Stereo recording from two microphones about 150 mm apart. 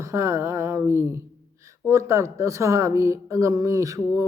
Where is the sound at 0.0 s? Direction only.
20° right (ahead or behind).